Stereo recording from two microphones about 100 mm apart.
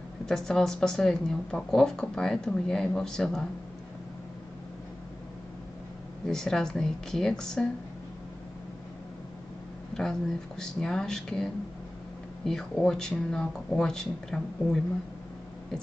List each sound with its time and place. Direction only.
0.3 s speech: 5° left (ahead or behind)
6.2 s speech: 5° left (ahead or behind)
9.9 s a sound: 5° left (ahead or behind)
10.6 s speech: 5° left (ahead or behind)